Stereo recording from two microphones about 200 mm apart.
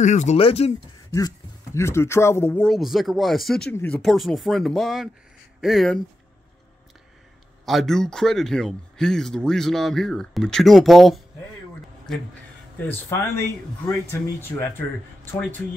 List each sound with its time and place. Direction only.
0.0 s speech: 35° left (ahead or behind)
1.1 s speech: 15° left (ahead or behind); by 5.9 s centre (ahead or behind)
7.6 s speech: centre (ahead or behind)
12.8 s speech: 10° left (ahead or behind)
14.4 s speech: 10° left (ahead or behind)